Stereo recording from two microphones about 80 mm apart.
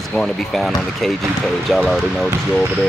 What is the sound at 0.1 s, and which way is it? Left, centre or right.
Speech, centre.